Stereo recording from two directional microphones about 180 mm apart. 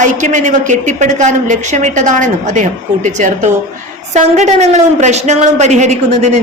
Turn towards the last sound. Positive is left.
turn(degrees=-40)  # may be behind; listen again after turning